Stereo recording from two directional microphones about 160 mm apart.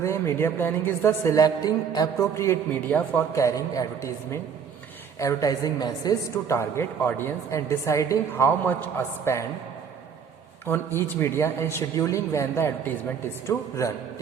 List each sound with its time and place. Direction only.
0.0 s a woman's voice: 15° left (ahead or behind)
10.7 s a woman's voice: 15° left (ahead or behind)